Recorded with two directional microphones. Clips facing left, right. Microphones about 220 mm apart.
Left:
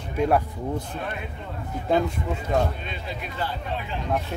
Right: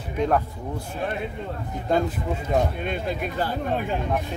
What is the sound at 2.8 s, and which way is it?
Speech, 50° right (ahead or behind).